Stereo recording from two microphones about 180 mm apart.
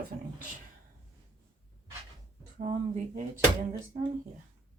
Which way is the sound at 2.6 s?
45° right (ahead or behind).